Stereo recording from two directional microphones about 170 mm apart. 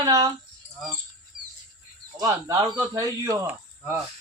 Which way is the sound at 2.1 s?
20° right (ahead or behind).